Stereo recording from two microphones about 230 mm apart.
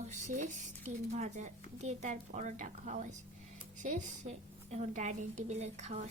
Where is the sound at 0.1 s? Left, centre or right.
Right.